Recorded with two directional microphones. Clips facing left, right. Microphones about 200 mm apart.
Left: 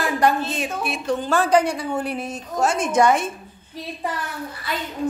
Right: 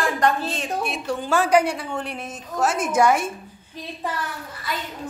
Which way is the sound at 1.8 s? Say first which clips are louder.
Left 5 dB; 5° left (ahead or behind).